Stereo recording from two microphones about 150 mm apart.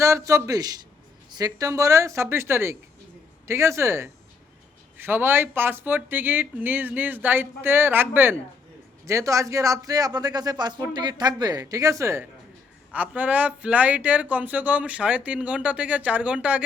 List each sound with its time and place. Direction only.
0.0 s speech: 20° right (ahead or behind)